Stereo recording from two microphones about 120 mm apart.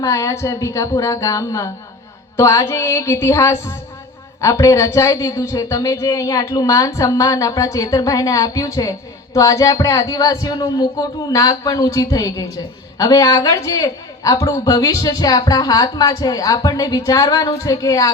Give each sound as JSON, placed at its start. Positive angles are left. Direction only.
{"t": 0.0, "sound": "a man's voice", "side_deg": 25}